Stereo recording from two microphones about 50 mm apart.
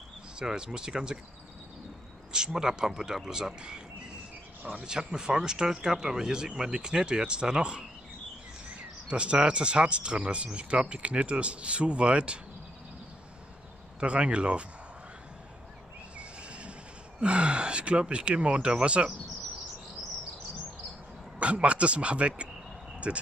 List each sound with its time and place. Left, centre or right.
0.4 s speech: centre
2.3 s speech: centre
13.9 s speech: right
16.2 s a sound: right
17.2 s speech: right
21.4 s speech: right